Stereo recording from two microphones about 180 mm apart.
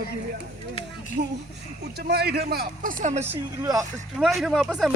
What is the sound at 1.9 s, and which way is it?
A man's voice, 65° right (ahead or behind).